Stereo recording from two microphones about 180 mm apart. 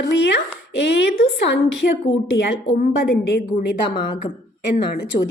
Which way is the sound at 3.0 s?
70° left (ahead or behind).